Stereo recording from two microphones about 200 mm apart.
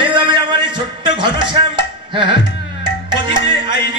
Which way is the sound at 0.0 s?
25° right (ahead or behind).